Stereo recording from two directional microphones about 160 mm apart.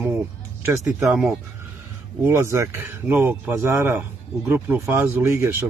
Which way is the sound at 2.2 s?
15° right (ahead or behind).